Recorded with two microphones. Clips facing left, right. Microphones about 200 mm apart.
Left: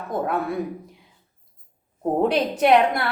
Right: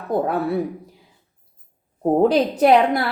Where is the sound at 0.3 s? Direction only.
35° right (ahead or behind).